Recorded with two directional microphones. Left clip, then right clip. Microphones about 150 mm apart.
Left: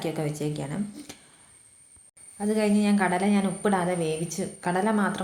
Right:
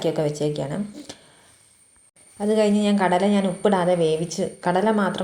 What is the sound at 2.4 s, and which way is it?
A woman's voice, 5° right (ahead or behind).